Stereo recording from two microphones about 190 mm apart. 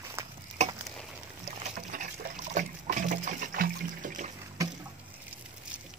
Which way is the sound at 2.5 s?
40° right (ahead or behind).